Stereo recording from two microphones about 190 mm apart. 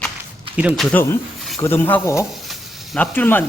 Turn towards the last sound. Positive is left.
turn(degrees=10)  # may be behind; listen again after turning